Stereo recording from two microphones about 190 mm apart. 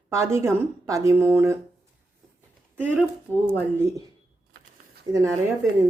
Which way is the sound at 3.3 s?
10° left (ahead or behind).